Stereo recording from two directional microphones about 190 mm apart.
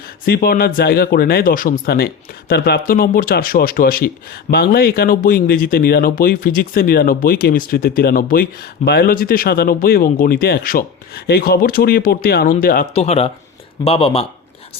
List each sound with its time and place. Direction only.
0.3 s speech: 50° left (ahead or behind)
12.9 s speech: 35° left (ahead or behind)